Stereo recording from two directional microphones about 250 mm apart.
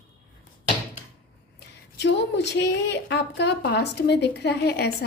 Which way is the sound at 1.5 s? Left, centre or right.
Left.